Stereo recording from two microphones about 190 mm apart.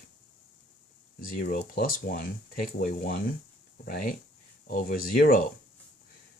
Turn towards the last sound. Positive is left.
turn(degrees=50)  # may be behind; listen again after turning